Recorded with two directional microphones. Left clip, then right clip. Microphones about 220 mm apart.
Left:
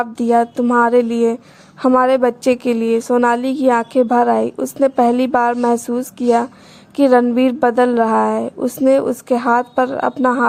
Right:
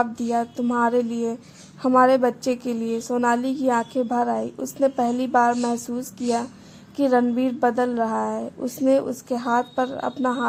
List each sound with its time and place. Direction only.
0.0 s a woman's voice: 30° left (ahead or behind)